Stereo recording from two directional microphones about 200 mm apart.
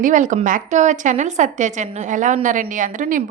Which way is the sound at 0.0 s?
40° right (ahead or behind).